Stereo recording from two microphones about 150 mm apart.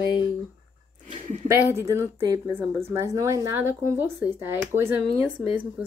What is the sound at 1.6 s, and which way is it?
A woman's voice, 15° right (ahead or behind).